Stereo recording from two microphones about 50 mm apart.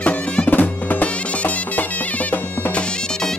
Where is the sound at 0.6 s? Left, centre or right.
Left.